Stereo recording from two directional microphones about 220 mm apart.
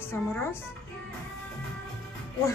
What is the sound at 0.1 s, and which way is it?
Speech, 10° left (ahead or behind).